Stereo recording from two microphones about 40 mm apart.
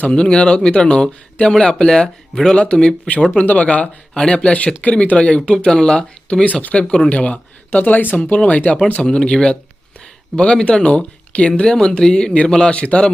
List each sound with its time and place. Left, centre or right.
0.1 s speech: left
3.5 s speech: left
4.1 s speech: left
4.5 s speech: left
5.6 s speech: centre
6.4 s speech: left
9.0 s speech: left
12.7 s speech: left